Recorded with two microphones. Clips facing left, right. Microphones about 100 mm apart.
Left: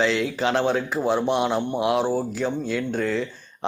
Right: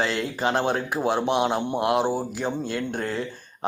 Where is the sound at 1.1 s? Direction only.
60° right (ahead or behind).